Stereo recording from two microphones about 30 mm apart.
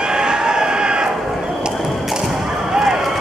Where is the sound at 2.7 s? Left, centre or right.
Centre.